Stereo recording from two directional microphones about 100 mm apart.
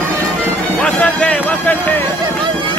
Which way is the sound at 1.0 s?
10° left (ahead or behind).